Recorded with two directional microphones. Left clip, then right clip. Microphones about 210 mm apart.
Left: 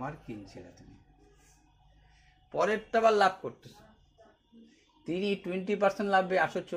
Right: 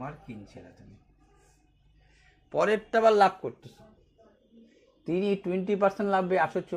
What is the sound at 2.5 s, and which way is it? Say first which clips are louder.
Speech: right 3 dB; 45° right (ahead or behind).